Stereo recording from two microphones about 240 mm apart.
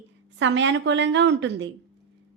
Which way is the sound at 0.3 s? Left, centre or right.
Right.